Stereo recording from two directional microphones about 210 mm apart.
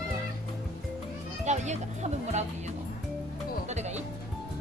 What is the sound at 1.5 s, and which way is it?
Music, 35° right (ahead or behind).